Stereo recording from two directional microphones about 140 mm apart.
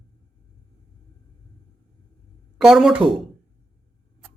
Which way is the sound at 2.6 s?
Centre (ahead or behind).